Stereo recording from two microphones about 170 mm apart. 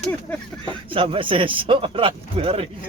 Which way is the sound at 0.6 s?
30° right (ahead or behind).